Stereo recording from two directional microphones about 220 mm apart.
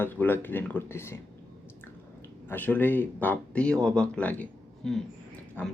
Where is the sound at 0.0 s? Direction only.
10° left (ahead or behind).